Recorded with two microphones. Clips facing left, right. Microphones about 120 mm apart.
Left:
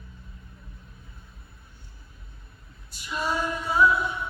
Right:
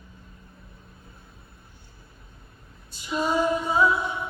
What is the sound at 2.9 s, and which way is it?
Female singing, 25° right (ahead or behind).